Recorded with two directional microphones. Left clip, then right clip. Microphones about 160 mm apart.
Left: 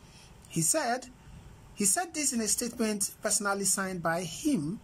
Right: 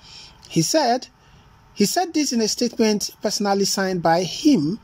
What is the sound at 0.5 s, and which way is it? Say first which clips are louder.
Speech: right 11 dB; 10° right (ahead or behind).